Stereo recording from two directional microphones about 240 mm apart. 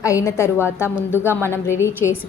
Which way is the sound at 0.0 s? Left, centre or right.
Centre.